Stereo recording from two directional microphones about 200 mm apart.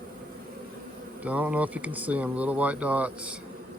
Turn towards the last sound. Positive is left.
turn(degrees=-5)  # may be behind; listen again after turning